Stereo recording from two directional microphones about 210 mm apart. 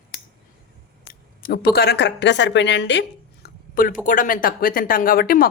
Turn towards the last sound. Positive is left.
turn(degrees=45)  # may be behind; listen again after turning